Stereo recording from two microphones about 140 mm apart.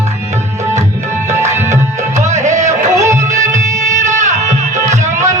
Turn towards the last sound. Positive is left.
turn(degrees=-55)  # may be behind; listen again after turning